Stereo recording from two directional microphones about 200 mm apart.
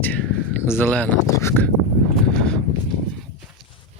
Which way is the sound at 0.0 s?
5° left (ahead or behind).